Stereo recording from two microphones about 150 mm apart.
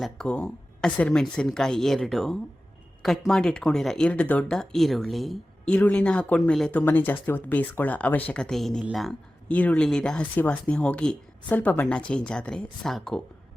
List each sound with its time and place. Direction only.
0.0 s speech: 5° left (ahead or behind)